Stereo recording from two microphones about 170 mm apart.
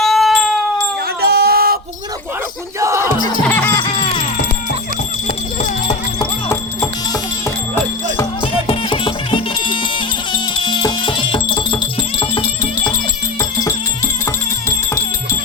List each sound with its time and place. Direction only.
0.0 s cat: centre (ahead or behind)
1.2 s a sound: 65° right (ahead or behind)
2.8 s music: 15° right (ahead or behind)
3.4 s music: 10° left (ahead or behind)
3.8 s music: 30° left (ahead or behind)
8.6 s music: 30° left (ahead or behind)
13.4 s music: 20° left (ahead or behind)